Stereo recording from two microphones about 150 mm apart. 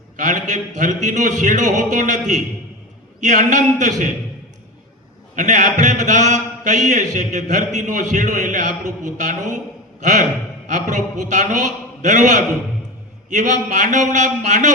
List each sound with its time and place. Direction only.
0.2 s speech: 55° right (ahead or behind)
5.4 s speech: 55° right (ahead or behind)